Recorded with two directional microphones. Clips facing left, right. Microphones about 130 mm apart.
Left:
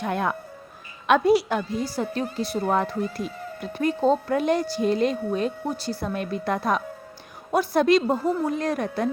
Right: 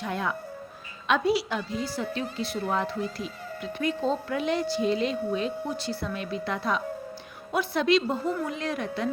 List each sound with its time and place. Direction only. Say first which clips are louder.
0.0 s speech: left 4 dB; 55° left (ahead or behind)